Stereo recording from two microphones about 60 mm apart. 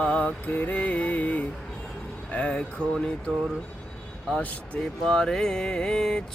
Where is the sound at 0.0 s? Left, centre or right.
Left.